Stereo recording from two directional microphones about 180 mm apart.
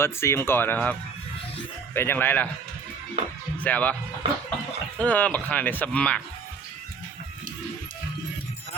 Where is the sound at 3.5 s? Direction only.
10° left (ahead or behind).